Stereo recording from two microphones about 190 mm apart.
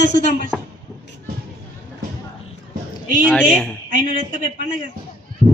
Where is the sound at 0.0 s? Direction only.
45° right (ahead or behind).